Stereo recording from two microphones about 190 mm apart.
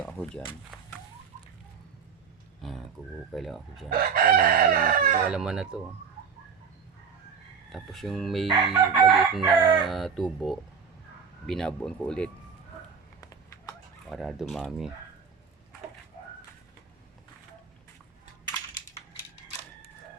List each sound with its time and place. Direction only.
0.0 s a sound: 5° left (ahead or behind)
0.7 s fowl: centre (ahead or behind)
2.6 s speech: centre (ahead or behind)
3.3 s chicken: centre (ahead or behind)
3.8 s chicken: 50° right (ahead or behind)
5.3 s chicken: 5° right (ahead or behind)
7.7 s chicken: centre (ahead or behind)
14.1 s chicken: centre (ahead or behind)